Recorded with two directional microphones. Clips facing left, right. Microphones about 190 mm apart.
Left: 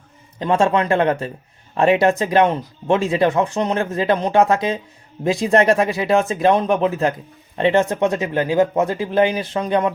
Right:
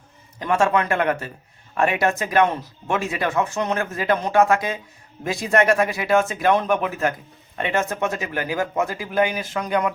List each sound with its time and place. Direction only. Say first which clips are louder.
0.3 s speech: left 3 dB; 30° left (ahead or behind)